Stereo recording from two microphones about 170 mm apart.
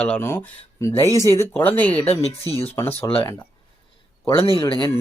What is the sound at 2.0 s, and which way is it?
Speech, 35° left (ahead or behind).